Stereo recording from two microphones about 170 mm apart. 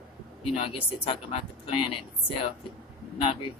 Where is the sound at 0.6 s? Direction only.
30° left (ahead or behind).